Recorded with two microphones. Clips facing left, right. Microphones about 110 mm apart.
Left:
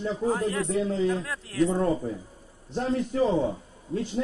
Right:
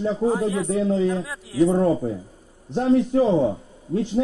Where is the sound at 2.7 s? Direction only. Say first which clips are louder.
Right 9 dB; 45° right (ahead or behind).